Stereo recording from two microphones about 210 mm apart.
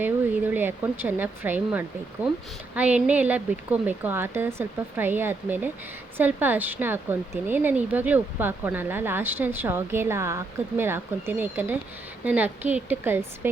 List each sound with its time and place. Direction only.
0.0 s speech: 10° right (ahead or behind)